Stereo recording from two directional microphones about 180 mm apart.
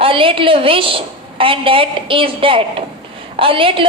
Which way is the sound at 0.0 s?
30° right (ahead or behind).